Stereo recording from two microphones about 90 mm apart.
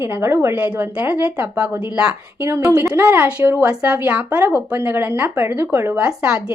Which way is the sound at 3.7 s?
15° right (ahead or behind).